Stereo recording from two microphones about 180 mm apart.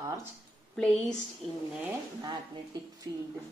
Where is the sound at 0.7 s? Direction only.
5° left (ahead or behind).